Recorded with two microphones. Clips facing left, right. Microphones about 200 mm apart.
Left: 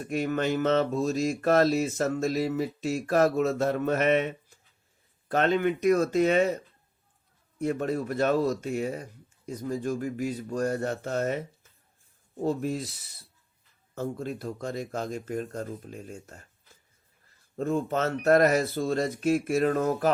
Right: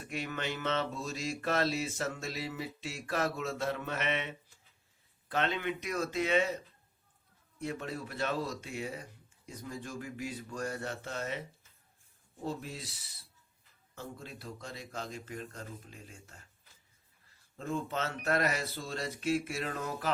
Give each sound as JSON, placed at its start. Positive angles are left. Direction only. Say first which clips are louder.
{"t": 0.0, "sound": "speech", "louder": "left 10 dB", "side_deg": 45}
{"t": 7.6, "sound": "speech", "louder": "left 10 dB", "side_deg": 50}
{"t": 17.6, "sound": "speech", "louder": "left 9 dB", "side_deg": 45}